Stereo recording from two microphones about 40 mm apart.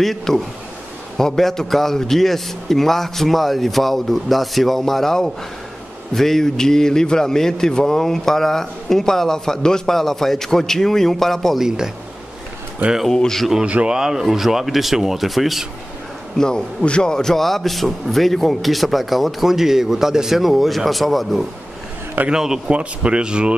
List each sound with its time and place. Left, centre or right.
0.0 s a man's voice: centre
11.5 s speech: centre
13.1 s a man's voice: centre
13.8 s a man's voice: centre
16.3 s a man's voice: centre
22.3 s speech: centre
22.7 s speech: right